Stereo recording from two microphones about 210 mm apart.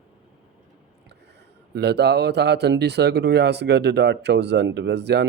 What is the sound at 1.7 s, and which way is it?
Speech, 50° right (ahead or behind).